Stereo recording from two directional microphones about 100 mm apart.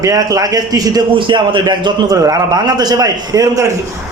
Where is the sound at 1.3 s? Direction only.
50° right (ahead or behind); by 3.6 s 35° right (ahead or behind).